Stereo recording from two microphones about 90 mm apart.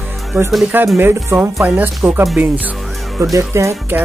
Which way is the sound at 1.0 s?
25° right (ahead or behind).